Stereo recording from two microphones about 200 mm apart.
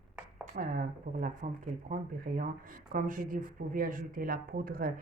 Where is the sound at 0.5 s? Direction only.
45° right (ahead or behind).